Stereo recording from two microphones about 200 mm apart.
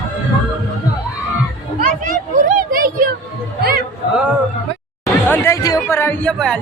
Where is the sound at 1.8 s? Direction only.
40° right (ahead or behind).